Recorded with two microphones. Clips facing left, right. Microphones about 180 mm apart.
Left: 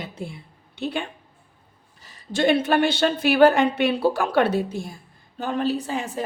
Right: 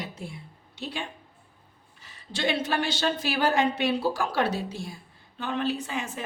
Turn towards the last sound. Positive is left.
turn(degrees=35)  # may be behind; listen again after turning